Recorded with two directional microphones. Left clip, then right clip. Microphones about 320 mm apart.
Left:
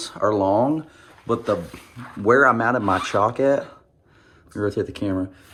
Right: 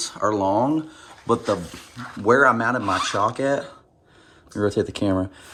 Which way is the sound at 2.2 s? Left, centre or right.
Centre.